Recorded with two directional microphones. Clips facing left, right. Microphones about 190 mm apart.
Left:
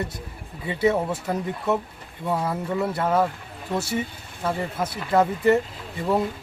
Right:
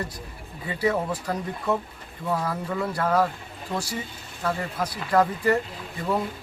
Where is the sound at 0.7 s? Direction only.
25° left (ahead or behind).